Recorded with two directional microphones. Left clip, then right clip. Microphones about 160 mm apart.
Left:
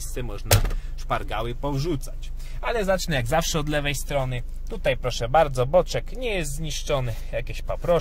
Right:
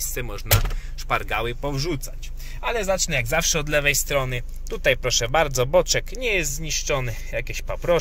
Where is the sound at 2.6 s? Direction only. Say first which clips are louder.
Right 1 dB; 40° left (ahead or behind).